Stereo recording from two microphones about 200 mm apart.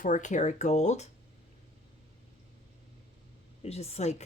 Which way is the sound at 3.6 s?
30° left (ahead or behind).